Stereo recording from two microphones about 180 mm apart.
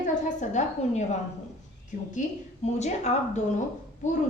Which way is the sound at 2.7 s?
40° left (ahead or behind).